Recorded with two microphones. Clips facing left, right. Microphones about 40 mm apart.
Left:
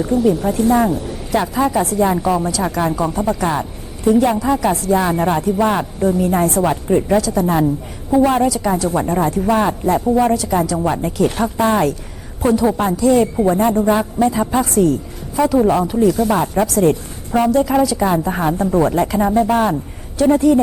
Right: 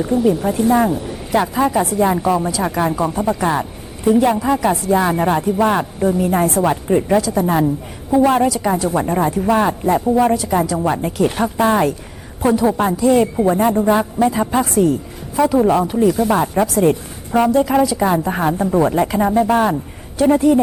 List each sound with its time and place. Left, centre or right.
0.0 s speech: centre